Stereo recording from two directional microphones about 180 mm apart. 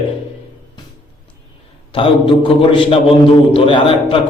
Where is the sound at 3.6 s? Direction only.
30° left (ahead or behind).